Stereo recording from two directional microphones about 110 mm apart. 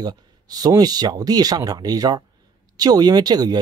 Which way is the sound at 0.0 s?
35° right (ahead or behind).